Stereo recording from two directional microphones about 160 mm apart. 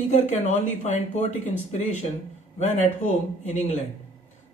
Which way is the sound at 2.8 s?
45° left (ahead or behind).